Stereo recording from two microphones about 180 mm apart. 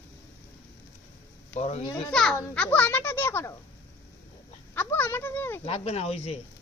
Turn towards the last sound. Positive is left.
turn(degrees=35)  # may be behind; listen again after turning